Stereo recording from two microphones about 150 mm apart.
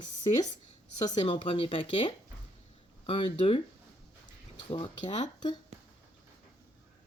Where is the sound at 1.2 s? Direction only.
40° left (ahead or behind).